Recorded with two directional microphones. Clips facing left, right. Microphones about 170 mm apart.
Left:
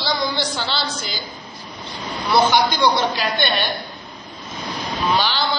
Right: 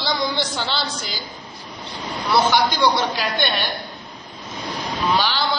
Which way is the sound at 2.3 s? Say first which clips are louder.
Left 1 dB; 10° right (ahead or behind).